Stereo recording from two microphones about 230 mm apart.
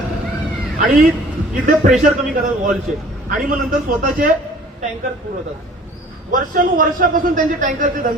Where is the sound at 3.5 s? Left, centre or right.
Right.